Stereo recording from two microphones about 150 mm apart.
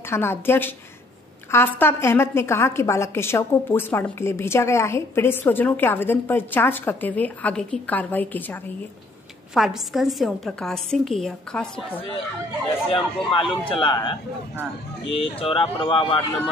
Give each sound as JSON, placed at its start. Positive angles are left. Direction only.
{"t": 0.1, "sound": "a woman's voice", "side_deg": 15}
{"t": 9.5, "sound": "a woman's voice", "side_deg": -5}
{"t": 12.9, "sound": "speech", "side_deg": 35}